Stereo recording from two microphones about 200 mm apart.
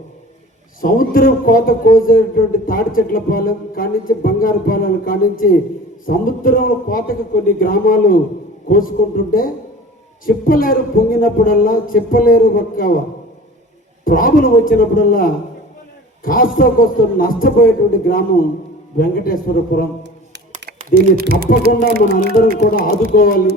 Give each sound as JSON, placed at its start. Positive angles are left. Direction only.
{"t": 0.8, "sound": "a man's voice", "side_deg": 45}
{"t": 14.0, "sound": "a man's voice", "side_deg": 45}
{"t": 18.9, "sound": "a man's voice", "side_deg": 45}
{"t": 20.9, "sound": "speech", "side_deg": -50}
{"t": 23.1, "sound": "a man's voice", "side_deg": 45}